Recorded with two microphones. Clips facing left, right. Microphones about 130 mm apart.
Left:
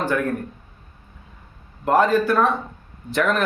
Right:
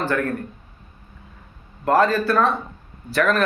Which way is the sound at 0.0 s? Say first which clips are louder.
Even; 15° left (ahead or behind).